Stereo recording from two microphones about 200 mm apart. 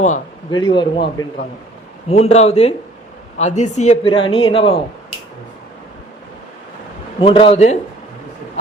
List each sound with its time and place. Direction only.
0.5 s a woman's voice: 20° left (ahead or behind)
7.2 s a woman's voice: 25° left (ahead or behind)